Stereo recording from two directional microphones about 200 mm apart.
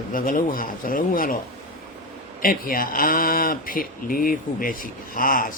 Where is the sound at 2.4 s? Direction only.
45° left (ahead or behind).